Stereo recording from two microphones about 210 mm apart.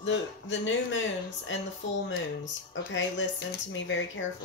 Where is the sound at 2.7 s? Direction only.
60° left (ahead or behind).